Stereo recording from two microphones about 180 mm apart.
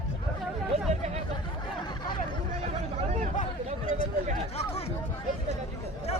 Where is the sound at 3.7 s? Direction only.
40° right (ahead or behind).